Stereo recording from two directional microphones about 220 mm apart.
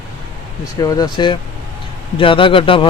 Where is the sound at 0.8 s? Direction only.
15° left (ahead or behind).